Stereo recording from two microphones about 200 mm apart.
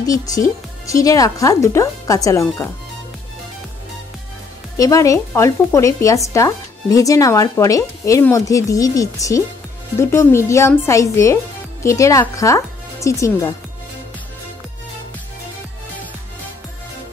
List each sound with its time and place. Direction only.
0.0 s speech: 15° left (ahead or behind)
4.7 s speech: 15° left (ahead or behind)